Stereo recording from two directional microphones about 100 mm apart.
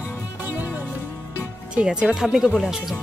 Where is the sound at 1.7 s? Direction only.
10° right (ahead or behind).